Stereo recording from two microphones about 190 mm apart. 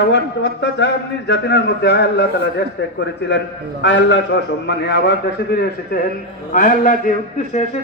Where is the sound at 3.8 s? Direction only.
70° left (ahead or behind); by 6.0 s 55° left (ahead or behind).